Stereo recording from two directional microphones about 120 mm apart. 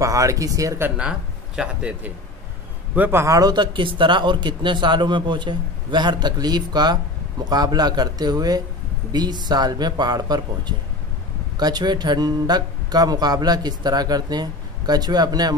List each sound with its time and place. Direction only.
0.0 s speech: 25° right (ahead or behind)
1.6 s a man's voice: 10° right (ahead or behind)
3.0 s speech: 20° right (ahead or behind)
11.5 s speech: 35° right (ahead or behind)